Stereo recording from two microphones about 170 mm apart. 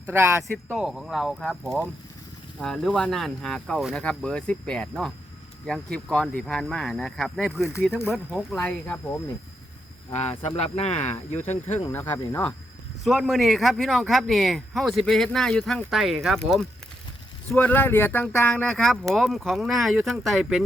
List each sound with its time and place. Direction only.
0.1 s speech: 15° right (ahead or behind)
0.8 s speech: centre (ahead or behind)
8.5 s speech: 15° left (ahead or behind)
10.1 s speech: 40° left (ahead or behind)
11.9 s speech: 10° left (ahead or behind)
13.1 s speech: centre (ahead or behind)